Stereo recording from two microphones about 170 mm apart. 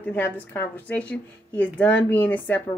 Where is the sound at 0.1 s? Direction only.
10° left (ahead or behind).